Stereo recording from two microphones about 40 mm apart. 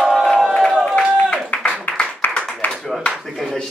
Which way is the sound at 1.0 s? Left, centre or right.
Centre.